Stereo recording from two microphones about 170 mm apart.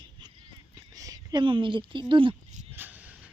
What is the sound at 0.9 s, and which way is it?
A woman's voice, 20° right (ahead or behind).